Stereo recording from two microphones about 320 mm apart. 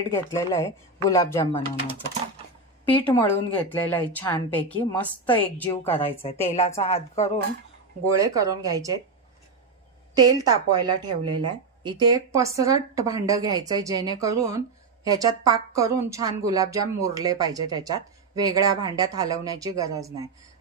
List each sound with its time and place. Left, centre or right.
0.1 s speech: centre
2.9 s a woman's voice: centre
5.9 s speech: centre
6.4 s a woman's voice: centre
8.2 s a woman's voice: centre
10.1 s a woman's voice: centre